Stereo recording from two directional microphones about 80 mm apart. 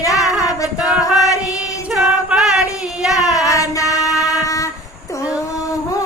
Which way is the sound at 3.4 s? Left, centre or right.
Left.